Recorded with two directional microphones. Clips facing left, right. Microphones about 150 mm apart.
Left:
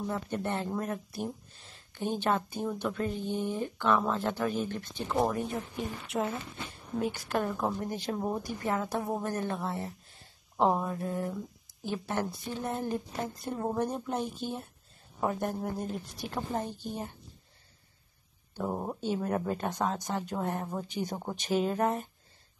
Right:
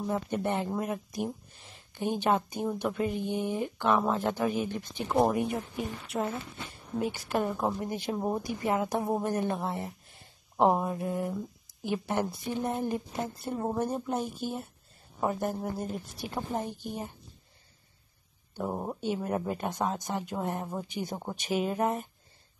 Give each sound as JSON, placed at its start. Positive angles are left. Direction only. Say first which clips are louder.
{"t": 0.0, "sound": "speech", "louder": "right 3 dB", "side_deg": -15}
{"t": 5.8, "sound": "a woman's voice", "louder": "even", "side_deg": 0}
{"t": 18.6, "sound": "speech", "louder": "even", "side_deg": -5}